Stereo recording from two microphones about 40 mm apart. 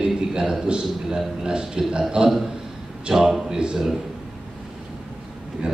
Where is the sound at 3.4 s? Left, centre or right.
Right.